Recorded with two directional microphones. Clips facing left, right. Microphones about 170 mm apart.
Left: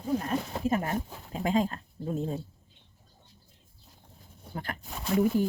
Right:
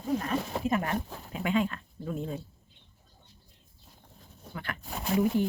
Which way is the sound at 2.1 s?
30° left (ahead or behind).